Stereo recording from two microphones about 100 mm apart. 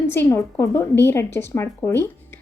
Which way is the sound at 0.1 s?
25° left (ahead or behind).